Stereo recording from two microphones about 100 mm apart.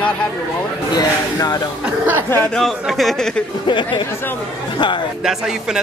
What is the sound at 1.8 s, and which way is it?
Speech, 15° right (ahead or behind).